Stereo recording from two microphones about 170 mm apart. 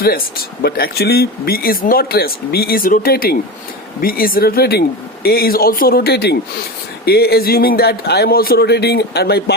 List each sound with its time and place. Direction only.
0.0 s a man's voice: 60° left (ahead or behind)